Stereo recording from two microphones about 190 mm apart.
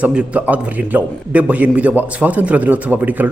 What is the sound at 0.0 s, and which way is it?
A man's voice, 5° right (ahead or behind).